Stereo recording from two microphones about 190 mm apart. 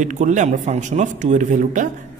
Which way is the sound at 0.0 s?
40° right (ahead or behind).